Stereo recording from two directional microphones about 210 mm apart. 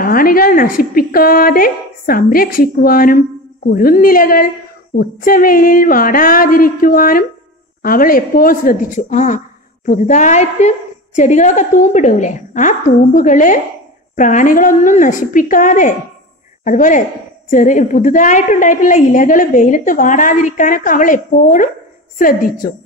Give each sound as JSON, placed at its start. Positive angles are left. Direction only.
{"t": 0.0, "sound": "a woman's voice", "side_deg": 45}